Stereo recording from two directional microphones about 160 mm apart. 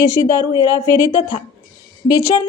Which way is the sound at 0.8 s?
20° left (ahead or behind).